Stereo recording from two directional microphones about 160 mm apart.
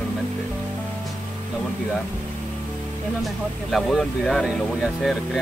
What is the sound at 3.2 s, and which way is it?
Speech, centre (ahead or behind).